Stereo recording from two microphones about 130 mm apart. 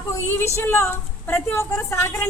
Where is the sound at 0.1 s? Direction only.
20° left (ahead or behind).